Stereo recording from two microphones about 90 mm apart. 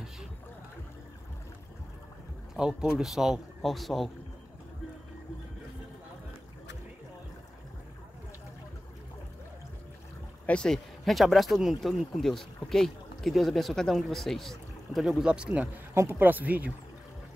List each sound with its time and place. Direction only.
2.5 s speech: 5° right (ahead or behind)
10.4 s speech: 10° left (ahead or behind); by 15.7 s 10° right (ahead or behind)
15.9 s speech: 25° right (ahead or behind)